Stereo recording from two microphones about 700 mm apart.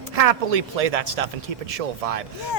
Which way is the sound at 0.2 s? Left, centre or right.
Right.